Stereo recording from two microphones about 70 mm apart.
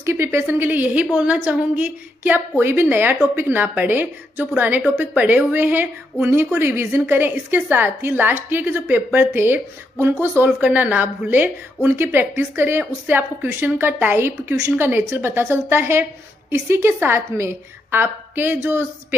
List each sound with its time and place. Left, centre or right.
0.0 s a woman's voice: right
10.4 s speech: right